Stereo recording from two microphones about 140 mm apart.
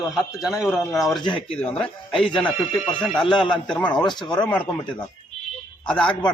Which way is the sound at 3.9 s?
30° left (ahead or behind).